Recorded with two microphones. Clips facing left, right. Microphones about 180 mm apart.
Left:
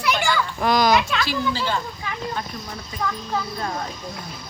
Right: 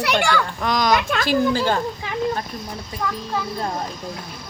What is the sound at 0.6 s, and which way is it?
Speech, 5° left (ahead or behind).